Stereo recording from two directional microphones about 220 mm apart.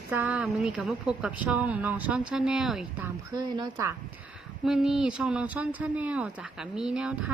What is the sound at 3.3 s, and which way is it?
Speech, 20° right (ahead or behind).